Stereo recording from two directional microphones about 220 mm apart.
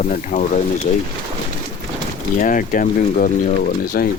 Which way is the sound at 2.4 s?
40° left (ahead or behind).